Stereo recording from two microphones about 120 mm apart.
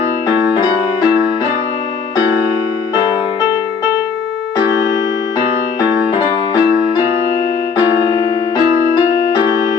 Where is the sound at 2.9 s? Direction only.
35° left (ahead or behind).